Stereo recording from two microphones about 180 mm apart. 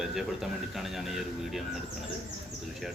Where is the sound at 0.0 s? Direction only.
Centre (ahead or behind).